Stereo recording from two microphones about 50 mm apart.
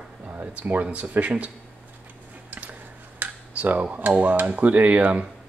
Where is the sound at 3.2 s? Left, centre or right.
Right.